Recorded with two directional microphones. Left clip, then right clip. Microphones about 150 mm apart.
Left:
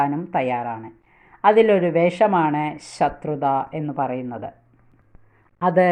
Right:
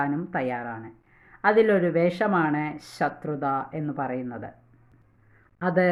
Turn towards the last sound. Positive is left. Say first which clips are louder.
# left 6 dB
turn(degrees=10)  # may be behind; listen again after turning